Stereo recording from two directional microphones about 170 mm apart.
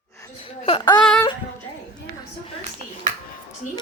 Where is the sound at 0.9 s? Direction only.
5° left (ahead or behind).